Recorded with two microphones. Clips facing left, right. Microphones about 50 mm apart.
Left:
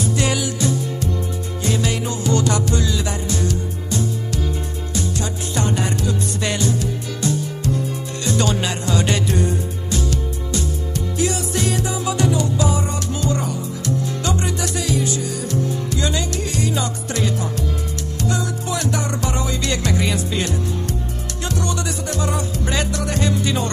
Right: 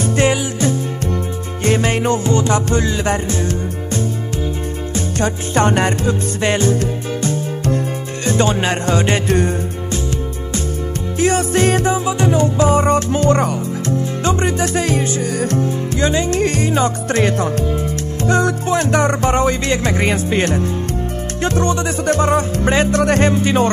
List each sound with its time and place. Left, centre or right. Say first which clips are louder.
0.0 s music: right 5 dB; right
2.3 s music: right 3 dB; right
6.0 s music: right 5 dB; right
11.1 s music: right 8 dB; right
12.0 s music: right 4 dB; right
13.8 s music: right 3 dB; right
18.2 s music: right 8 dB; right